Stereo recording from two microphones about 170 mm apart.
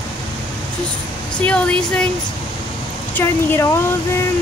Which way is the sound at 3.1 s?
15° left (ahead or behind).